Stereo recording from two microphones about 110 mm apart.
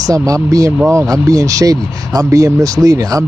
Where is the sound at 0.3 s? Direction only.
30° right (ahead or behind).